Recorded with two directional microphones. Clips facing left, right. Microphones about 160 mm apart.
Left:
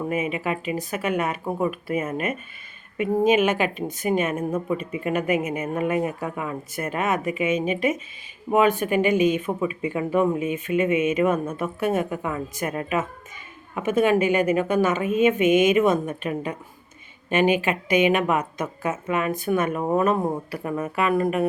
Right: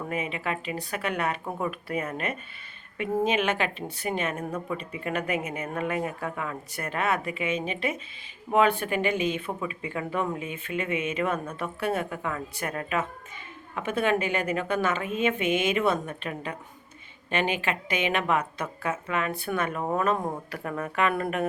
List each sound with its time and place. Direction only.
0.1 s speech: 10° left (ahead or behind)
3.0 s speech: 10° left (ahead or behind)
4.4 s a woman's voice: 25° left (ahead or behind)
5.0 s a woman's voice: 15° left (ahead or behind)
20.9 s speech: 5° left (ahead or behind)